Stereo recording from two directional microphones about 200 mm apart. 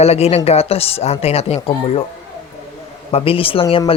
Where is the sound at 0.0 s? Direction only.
30° left (ahead or behind).